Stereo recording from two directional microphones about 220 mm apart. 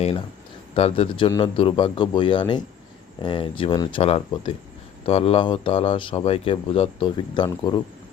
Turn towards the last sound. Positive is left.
turn(degrees=20)  # may be behind; listen again after turning